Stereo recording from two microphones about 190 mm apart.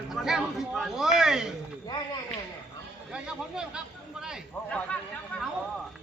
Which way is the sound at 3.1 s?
5° right (ahead or behind).